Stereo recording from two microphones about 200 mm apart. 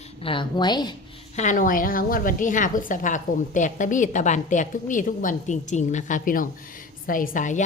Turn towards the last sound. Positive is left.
turn(degrees=40)  # may be behind; listen again after turning